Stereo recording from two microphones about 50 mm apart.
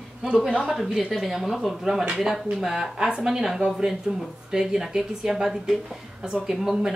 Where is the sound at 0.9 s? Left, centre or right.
Centre.